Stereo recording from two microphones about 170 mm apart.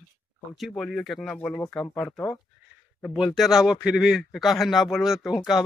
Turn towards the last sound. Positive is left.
turn(degrees=0)  # may be behind; listen again after turning